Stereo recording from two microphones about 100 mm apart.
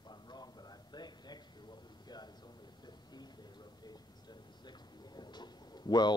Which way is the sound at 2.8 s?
45° left (ahead or behind).